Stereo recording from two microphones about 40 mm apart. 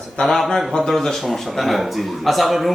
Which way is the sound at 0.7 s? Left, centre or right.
Centre.